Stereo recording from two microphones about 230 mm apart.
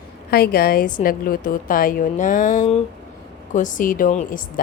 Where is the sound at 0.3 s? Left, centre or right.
Left.